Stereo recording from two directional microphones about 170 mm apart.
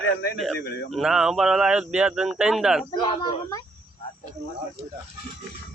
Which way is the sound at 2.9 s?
25° left (ahead or behind).